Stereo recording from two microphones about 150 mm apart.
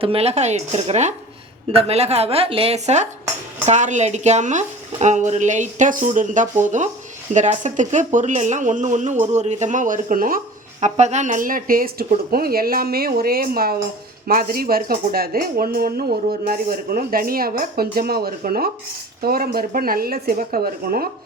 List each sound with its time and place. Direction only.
0.0 s a woman's voice: 40° right (ahead or behind); by 10.4 s 70° right (ahead or behind)
10.8 s speech: 50° right (ahead or behind); by 12.0 s 70° right (ahead or behind)
12.3 s speech: 85° right